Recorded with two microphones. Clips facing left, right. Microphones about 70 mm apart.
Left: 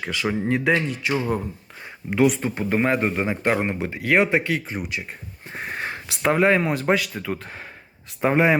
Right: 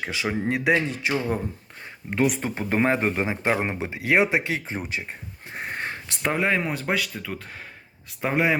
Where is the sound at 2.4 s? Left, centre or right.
Right; by 4.4 s centre.